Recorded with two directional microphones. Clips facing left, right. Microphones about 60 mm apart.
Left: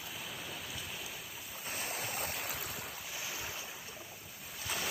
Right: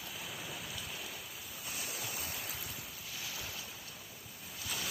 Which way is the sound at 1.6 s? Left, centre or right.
Left.